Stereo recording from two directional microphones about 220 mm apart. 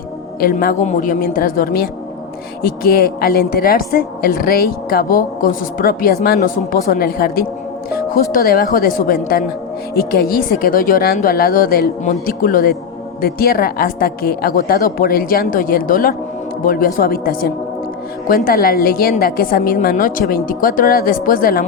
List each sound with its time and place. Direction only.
0.3 s a woman's voice: 40° left (ahead or behind)